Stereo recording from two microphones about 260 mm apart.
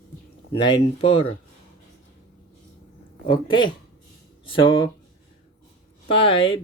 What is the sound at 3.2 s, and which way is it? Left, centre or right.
Speech, centre.